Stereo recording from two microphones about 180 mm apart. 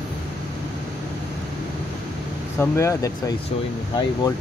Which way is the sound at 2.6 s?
15° left (ahead or behind).